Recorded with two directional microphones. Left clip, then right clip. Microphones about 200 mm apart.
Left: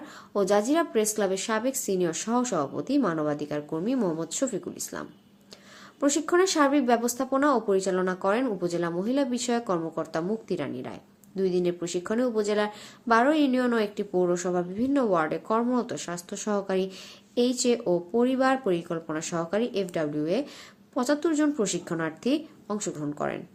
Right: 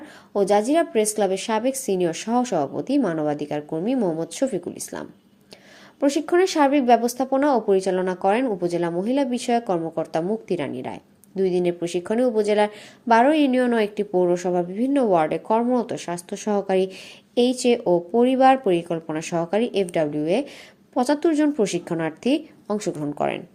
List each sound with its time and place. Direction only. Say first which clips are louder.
0.3 s speech: right 5 dB; 10° right (ahead or behind)